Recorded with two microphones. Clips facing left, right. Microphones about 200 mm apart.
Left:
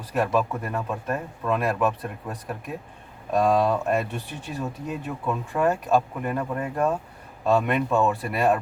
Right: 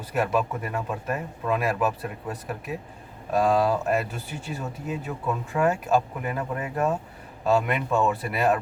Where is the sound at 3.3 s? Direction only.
Centre (ahead or behind).